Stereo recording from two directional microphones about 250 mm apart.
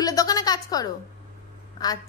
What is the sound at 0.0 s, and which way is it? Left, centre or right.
Music, centre.